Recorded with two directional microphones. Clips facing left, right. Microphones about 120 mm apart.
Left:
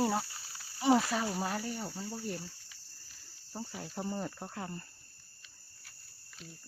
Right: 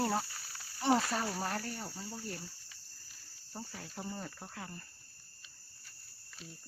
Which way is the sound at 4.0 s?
25° left (ahead or behind).